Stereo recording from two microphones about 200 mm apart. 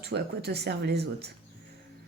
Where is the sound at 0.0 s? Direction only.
55° right (ahead or behind).